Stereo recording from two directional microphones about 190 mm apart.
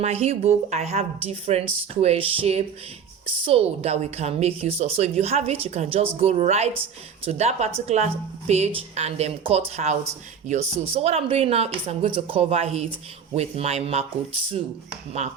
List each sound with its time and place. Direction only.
0.0 s a woman's voice: 35° right (ahead or behind)